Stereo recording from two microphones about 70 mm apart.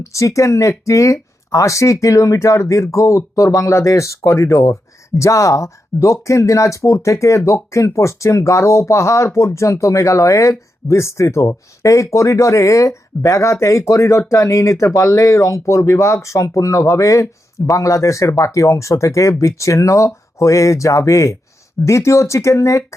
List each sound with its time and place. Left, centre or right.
0.0 s speech: left